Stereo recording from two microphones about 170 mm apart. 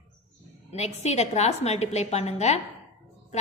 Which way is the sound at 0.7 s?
40° left (ahead or behind).